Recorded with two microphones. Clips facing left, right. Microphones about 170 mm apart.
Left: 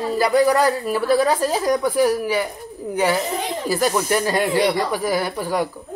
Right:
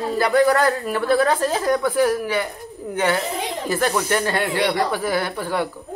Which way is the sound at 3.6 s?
10° left (ahead or behind).